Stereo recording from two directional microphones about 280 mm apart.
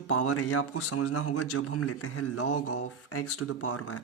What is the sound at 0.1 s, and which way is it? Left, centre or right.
Speech, left.